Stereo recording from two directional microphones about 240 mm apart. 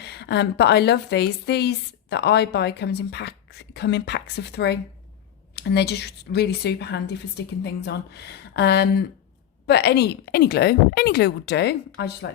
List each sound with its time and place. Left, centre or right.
0.0 s a woman's voice: left